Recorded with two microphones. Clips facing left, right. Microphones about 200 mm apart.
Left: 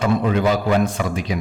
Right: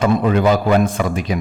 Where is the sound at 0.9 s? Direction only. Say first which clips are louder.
Right 3 dB; 50° right (ahead or behind).